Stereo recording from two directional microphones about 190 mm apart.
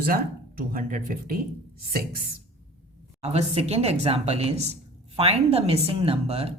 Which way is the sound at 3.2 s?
35° right (ahead or behind).